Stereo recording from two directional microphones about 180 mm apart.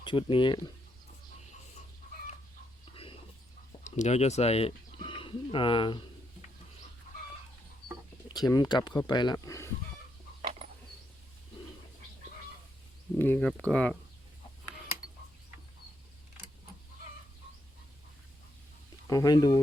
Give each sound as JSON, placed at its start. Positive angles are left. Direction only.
{"t": 0.0, "sound": "speech", "side_deg": 25}
{"t": 2.9, "sound": "dog", "side_deg": 30}
{"t": 3.8, "sound": "speech", "side_deg": 40}
{"t": 8.3, "sound": "speech", "side_deg": 20}
{"t": 13.1, "sound": "speech", "side_deg": 10}
{"t": 19.0, "sound": "speech", "side_deg": 20}